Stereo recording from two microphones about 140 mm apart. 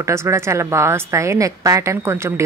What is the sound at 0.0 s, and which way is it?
A woman's voice, 20° right (ahead or behind).